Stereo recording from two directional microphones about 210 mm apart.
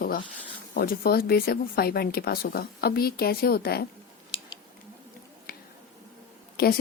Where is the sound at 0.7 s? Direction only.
45° left (ahead or behind).